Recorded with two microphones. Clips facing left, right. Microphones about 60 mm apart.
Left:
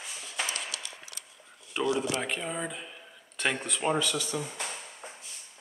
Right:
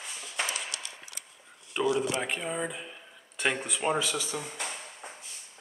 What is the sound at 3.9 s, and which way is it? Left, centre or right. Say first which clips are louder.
Speech: left 1 dB; centre.